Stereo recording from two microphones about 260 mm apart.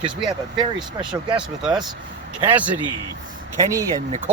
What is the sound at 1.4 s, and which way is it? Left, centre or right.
Speech, centre.